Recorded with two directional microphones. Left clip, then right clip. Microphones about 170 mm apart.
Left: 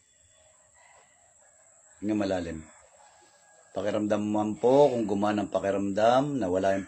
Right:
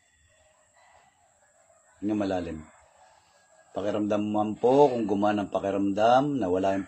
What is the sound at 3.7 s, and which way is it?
Speech, 10° left (ahead or behind).